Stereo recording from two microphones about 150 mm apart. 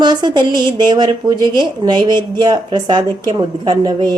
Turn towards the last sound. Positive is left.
turn(degrees=-30)  # may be behind; listen again after turning